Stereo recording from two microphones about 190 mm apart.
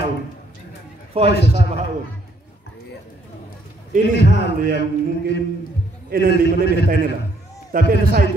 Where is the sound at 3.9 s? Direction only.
40° right (ahead or behind).